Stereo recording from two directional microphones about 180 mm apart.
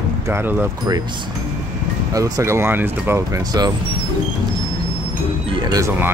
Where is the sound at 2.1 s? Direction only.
20° right (ahead or behind).